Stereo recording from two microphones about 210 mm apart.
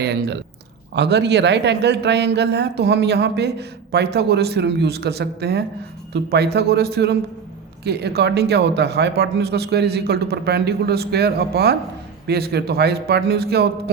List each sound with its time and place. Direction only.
0.0 s a man's voice: 55° right (ahead or behind)